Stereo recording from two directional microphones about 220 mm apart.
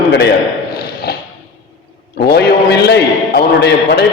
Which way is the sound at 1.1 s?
45° left (ahead or behind).